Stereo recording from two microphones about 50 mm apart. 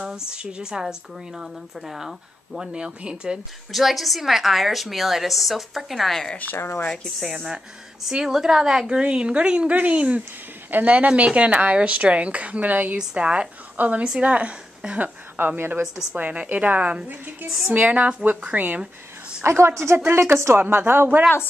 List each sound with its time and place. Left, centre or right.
0.3 s speech: centre
3.7 s a woman's voice: centre
6.5 s speech: left
8.1 s speech: centre; by 12.9 s right
12.9 s a woman's voice: right
15.0 s a woman's voice: right
16.1 s a woman's voice: right
19.4 s a woman's voice: right
20.6 s speech: right